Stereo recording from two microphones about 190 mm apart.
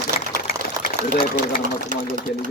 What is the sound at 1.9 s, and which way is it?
Speech, 45° right (ahead or behind).